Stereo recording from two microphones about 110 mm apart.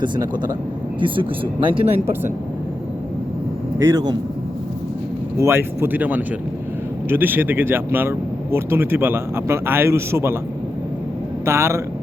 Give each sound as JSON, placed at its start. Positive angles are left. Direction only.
{"t": 0.0, "sound": "speech", "side_deg": -40}
{"t": 0.9, "sound": "speech", "side_deg": -50}
{"t": 3.8, "sound": "speech", "side_deg": -25}
{"t": 5.4, "sound": "speech", "side_deg": -20}
{"t": 11.4, "sound": "speech", "side_deg": -25}